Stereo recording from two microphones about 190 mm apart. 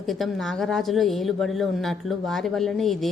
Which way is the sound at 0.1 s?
Centre (ahead or behind).